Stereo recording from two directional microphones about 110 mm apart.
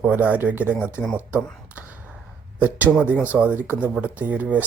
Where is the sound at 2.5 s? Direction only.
15° right (ahead or behind).